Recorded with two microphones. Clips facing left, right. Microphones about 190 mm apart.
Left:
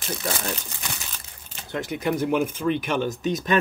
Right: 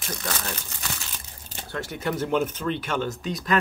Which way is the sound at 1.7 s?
15° left (ahead or behind).